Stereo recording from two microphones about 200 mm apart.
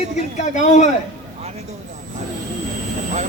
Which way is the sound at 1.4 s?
35° right (ahead or behind).